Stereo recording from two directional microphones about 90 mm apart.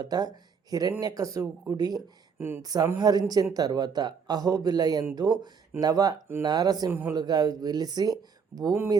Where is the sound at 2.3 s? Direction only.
25° right (ahead or behind).